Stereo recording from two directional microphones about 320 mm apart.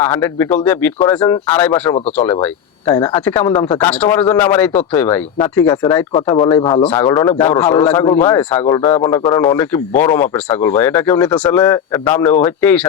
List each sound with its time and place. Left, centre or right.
0.0 s a man's voice: centre
6.1 s a man's voice: left; by 12.9 s centre